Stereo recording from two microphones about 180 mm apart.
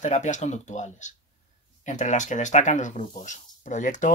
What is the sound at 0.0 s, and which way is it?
Speech, 40° left (ahead or behind).